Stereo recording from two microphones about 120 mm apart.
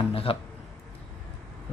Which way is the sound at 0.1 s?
50° left (ahead or behind).